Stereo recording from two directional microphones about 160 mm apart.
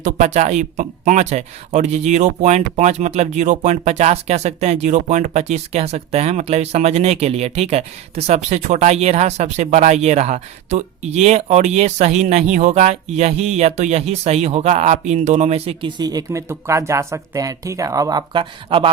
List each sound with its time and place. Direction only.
0.0 s speech: 50° right (ahead or behind)
16.0 s speech: 25° right (ahead or behind)